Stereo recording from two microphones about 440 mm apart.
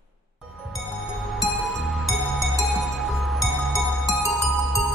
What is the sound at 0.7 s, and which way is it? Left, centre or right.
Music, centre.